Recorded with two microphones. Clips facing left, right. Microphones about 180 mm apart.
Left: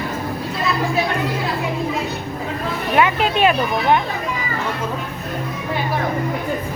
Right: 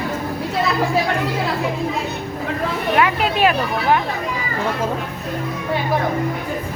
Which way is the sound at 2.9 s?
Centre (ahead or behind).